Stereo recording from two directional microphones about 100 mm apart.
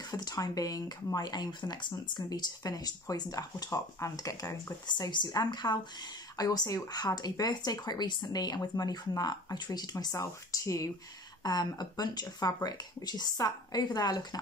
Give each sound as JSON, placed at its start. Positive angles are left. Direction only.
{"t": 0.0, "sound": "speech", "side_deg": 40}
{"t": 4.8, "sound": "speech", "side_deg": 50}